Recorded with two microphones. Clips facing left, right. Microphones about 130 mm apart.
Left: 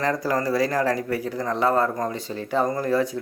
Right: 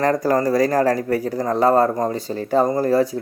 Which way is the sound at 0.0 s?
45° right (ahead or behind).